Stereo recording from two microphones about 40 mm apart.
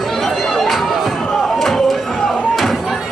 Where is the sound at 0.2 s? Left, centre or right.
Centre.